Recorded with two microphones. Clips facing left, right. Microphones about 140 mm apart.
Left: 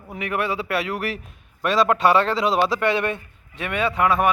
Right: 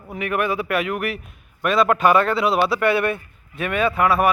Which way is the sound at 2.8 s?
20° left (ahead or behind).